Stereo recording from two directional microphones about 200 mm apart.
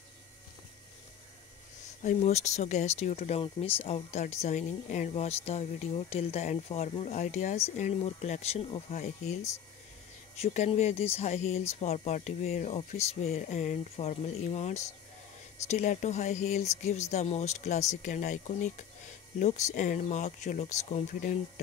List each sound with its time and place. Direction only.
2.0 s speech: 35° left (ahead or behind)